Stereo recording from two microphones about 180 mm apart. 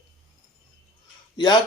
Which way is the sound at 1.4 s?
25° left (ahead or behind).